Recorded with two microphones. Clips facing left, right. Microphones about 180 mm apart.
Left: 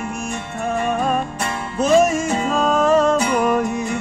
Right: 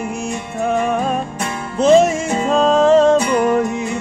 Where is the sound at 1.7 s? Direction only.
25° right (ahead or behind).